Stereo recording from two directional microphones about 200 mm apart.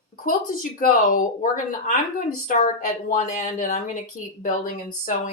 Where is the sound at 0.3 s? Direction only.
45° left (ahead or behind).